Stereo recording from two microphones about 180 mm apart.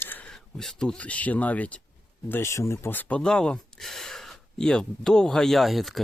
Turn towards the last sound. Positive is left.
turn(degrees=0)  # may be behind; listen again after turning